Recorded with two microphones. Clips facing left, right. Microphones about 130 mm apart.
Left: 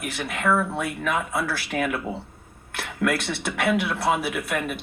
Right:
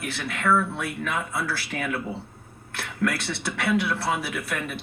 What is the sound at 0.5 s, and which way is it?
Speech, 50° left (ahead or behind).